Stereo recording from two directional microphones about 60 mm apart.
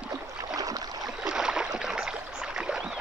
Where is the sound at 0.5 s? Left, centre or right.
Right.